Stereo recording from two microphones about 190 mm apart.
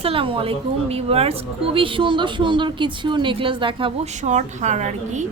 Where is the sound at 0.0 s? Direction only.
30° right (ahead or behind).